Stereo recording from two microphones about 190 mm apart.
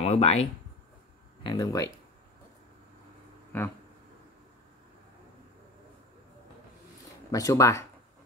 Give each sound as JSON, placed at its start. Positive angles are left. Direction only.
{"t": 0.0, "sound": "speech", "side_deg": 30}
{"t": 1.4, "sound": "speech", "side_deg": 20}
{"t": 3.5, "sound": "speech", "side_deg": 10}
{"t": 7.2, "sound": "speech", "side_deg": 20}